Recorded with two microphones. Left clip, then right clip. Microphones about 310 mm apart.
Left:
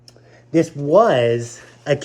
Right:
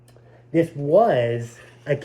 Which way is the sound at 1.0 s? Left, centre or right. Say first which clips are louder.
Left 5 dB; centre.